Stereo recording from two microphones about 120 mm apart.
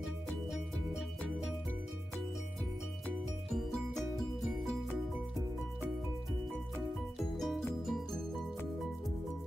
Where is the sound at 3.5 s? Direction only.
Centre (ahead or behind).